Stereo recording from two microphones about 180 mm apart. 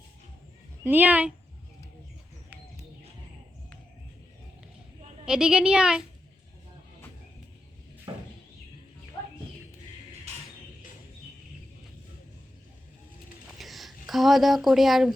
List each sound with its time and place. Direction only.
0.9 s speech: 10° right (ahead or behind)
5.2 s a woman's voice: 5° right (ahead or behind)
8.1 s a sound: 25° right (ahead or behind)
13.6 s speech: centre (ahead or behind)